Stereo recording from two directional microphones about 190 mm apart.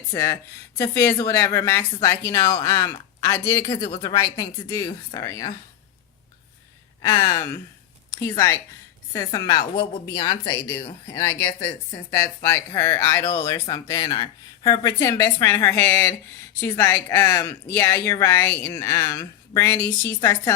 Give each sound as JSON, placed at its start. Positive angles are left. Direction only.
{"t": 0.1, "sound": "a woman's voice", "side_deg": 15}
{"t": 7.1, "sound": "a woman's voice", "side_deg": 15}